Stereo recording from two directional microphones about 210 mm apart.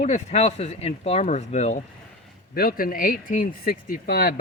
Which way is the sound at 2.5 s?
45° left (ahead or behind).